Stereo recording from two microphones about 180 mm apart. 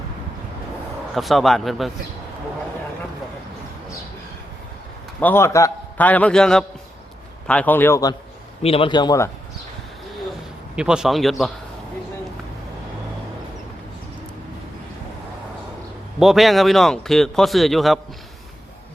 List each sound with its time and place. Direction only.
1.1 s a man's voice: centre (ahead or behind)
5.2 s a man's voice: 15° left (ahead or behind)
8.6 s a man's voice: 30° left (ahead or behind)
10.8 s a man's voice: 5° right (ahead or behind)
16.2 s a man's voice: centre (ahead or behind)